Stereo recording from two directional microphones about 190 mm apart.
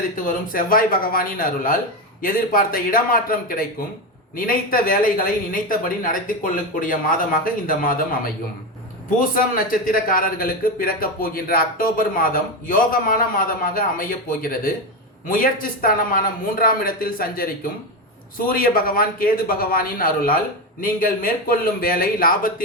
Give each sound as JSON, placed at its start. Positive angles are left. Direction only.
{"t": 0.4, "sound": "a man's voice", "side_deg": 45}